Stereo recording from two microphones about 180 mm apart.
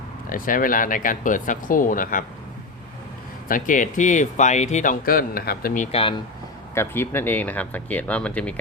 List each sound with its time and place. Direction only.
0.3 s speech: 50° left (ahead or behind)
3.5 s speech: 45° left (ahead or behind)
6.7 s speech: 10° left (ahead or behind)